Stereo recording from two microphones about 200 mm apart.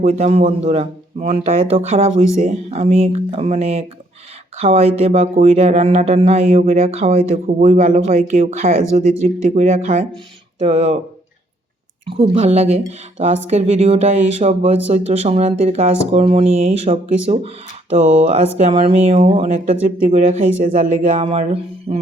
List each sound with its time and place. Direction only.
0.0 s speech: 30° right (ahead or behind)
12.0 s speech: 25° right (ahead or behind)